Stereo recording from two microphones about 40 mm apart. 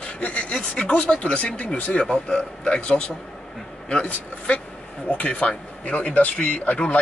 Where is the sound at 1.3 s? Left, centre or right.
Left.